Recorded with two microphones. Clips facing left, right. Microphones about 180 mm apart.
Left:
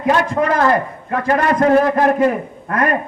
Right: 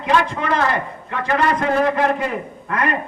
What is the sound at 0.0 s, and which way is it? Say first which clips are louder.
A man's voice: left 3 dB; 45° left (ahead or behind).